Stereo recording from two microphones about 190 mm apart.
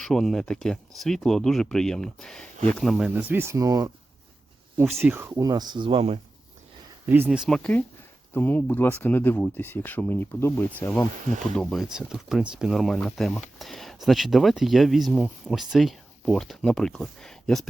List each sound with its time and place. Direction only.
0.0 s speech: centre (ahead or behind); by 3.9 s 20° right (ahead or behind)
4.9 s speech: centre (ahead or behind)
5.1 s speech: 15° right (ahead or behind); by 6.1 s 30° right (ahead or behind)
7.1 s speech: 5° right (ahead or behind)